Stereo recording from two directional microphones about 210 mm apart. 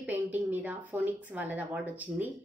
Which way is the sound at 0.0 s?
10° right (ahead or behind).